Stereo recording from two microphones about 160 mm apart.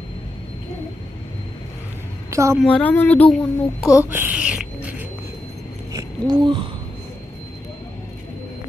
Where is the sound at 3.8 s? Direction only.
20° left (ahead or behind).